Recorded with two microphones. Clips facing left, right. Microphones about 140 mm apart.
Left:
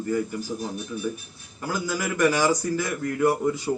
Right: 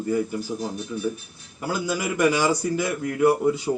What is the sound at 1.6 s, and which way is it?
A man's voice, 20° right (ahead or behind).